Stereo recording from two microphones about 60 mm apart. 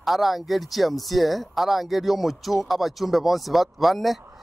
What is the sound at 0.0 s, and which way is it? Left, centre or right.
A man's voice, centre.